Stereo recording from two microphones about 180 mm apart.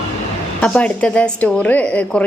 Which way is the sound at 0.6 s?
5° left (ahead or behind).